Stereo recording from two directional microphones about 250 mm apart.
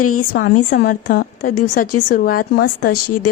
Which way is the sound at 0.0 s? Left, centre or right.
Left.